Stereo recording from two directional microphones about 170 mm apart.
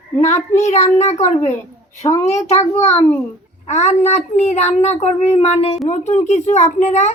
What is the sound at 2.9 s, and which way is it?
Speech, 10° left (ahead or behind).